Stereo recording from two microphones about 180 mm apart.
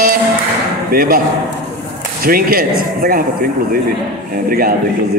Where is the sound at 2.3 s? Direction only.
55° right (ahead or behind).